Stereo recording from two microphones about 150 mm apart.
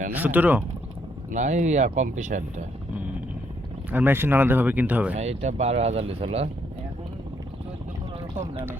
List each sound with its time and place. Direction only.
0.1 s speech: 10° right (ahead or behind)
1.3 s speech: 55° right (ahead or behind)
3.9 s speech: 15° right (ahead or behind)
5.1 s speech: 45° right (ahead or behind)